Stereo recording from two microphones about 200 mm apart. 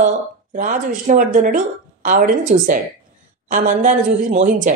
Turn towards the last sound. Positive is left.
turn(degrees=-40)  # may be behind; listen again after turning